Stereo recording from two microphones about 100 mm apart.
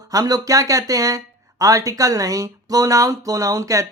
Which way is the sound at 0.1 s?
35° right (ahead or behind).